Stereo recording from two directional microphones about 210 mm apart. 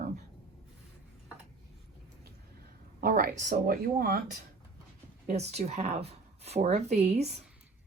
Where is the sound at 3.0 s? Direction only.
40° right (ahead or behind).